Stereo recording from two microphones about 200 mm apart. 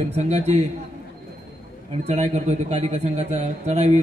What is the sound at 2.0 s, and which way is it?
A man's voice, 35° right (ahead or behind).